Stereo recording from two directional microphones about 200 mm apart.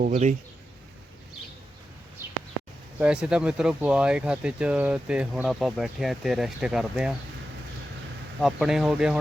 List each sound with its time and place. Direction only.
0.1 s speech: 35° right (ahead or behind)
3.0 s speech: 5° right (ahead or behind)
8.4 s speech: centre (ahead or behind)